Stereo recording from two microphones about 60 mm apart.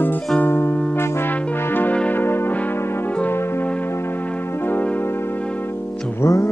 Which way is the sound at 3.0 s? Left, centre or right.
Left.